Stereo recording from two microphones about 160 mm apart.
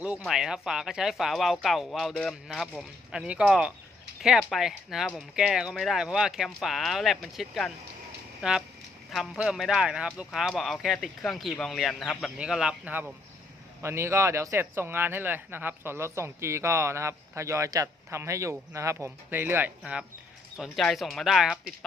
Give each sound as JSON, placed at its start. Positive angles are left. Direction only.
{"t": 0.0, "sound": "speech", "side_deg": -5}